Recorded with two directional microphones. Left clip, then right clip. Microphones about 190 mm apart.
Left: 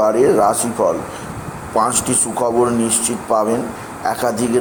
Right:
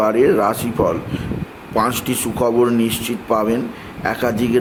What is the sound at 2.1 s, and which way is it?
Speech, 50° right (ahead or behind).